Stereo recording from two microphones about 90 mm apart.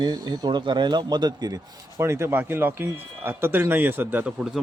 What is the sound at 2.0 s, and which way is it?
Speech, 30° right (ahead or behind).